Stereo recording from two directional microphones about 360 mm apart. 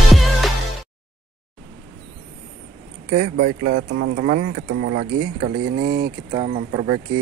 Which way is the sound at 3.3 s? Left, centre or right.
Right.